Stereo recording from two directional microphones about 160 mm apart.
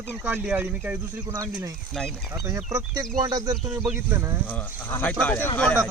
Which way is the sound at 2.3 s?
20° right (ahead or behind).